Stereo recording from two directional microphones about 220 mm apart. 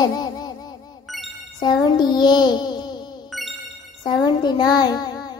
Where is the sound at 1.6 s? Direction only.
20° left (ahead or behind).